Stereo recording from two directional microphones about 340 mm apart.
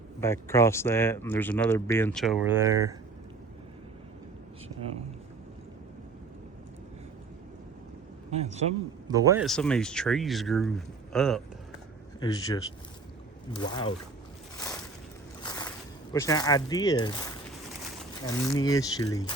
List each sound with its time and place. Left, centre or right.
0.2 s speech: centre
8.3 s a man's voice: centre
15.4 s a sound: centre
16.1 s speech: centre